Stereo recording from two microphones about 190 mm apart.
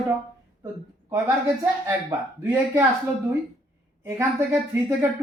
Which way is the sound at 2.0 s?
15° right (ahead or behind).